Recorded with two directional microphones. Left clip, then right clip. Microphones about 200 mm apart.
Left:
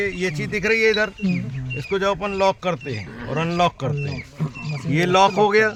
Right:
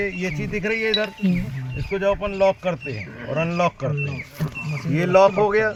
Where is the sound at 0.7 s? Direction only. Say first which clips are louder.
Left 4 dB; 45° left (ahead or behind).